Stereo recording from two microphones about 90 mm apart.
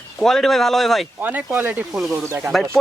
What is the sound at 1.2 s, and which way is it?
Speech, 15° right (ahead or behind).